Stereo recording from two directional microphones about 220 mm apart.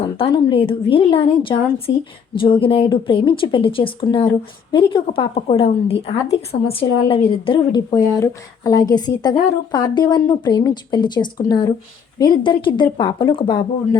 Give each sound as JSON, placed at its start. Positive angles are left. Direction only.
{"t": 0.3, "sound": "a woman's voice", "side_deg": 25}